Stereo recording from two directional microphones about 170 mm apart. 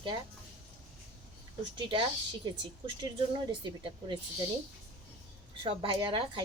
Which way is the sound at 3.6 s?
30° right (ahead or behind).